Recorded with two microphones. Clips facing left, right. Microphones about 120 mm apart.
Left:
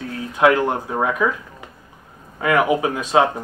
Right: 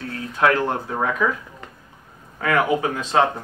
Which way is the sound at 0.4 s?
15° left (ahead or behind).